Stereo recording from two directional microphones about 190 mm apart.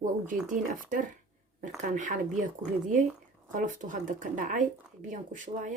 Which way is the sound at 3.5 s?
45° right (ahead or behind).